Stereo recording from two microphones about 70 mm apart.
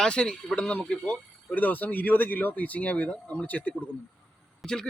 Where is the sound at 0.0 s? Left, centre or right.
Centre.